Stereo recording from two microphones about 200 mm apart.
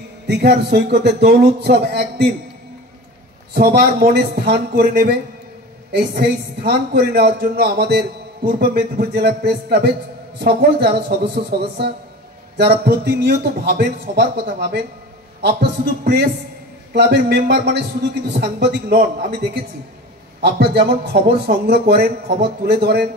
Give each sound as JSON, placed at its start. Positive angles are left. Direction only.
{"t": 0.3, "sound": "speech", "side_deg": -55}
{"t": 3.5, "sound": "a woman's voice", "side_deg": -50}
{"t": 12.5, "sound": "a woman's voice", "side_deg": -55}
{"t": 20.3, "sound": "a woman's voice", "side_deg": -55}